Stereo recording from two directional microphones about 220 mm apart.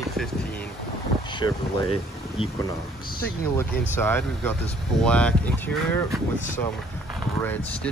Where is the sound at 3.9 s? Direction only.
10° left (ahead or behind).